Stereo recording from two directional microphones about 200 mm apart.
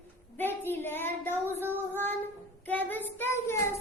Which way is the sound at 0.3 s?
10° left (ahead or behind).